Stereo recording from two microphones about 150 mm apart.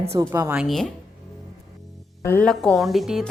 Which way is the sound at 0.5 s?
Centre (ahead or behind).